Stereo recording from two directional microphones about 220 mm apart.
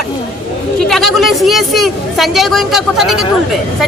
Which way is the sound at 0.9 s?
Centre (ahead or behind).